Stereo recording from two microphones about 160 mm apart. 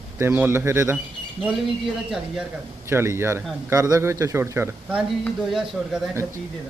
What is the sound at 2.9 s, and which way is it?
A man's voice, 15° right (ahead or behind).